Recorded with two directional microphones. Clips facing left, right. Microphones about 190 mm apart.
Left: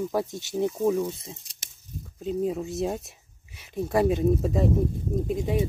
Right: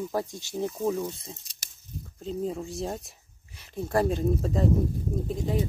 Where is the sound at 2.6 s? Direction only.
20° left (ahead or behind).